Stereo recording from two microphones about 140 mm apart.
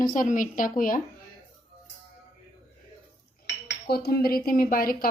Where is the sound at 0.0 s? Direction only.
80° left.